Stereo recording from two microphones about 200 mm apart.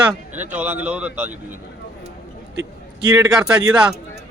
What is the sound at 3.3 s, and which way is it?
Speech, 5° right (ahead or behind).